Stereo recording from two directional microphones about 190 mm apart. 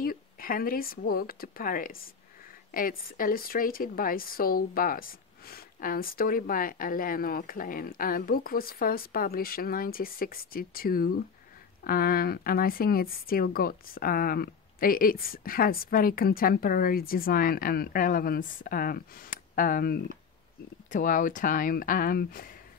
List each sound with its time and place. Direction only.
0.0 s speech: 50° left (ahead or behind)
20.9 s speech: 45° left (ahead or behind)